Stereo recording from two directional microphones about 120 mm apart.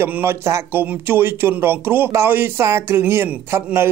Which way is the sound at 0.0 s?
20° right (ahead or behind).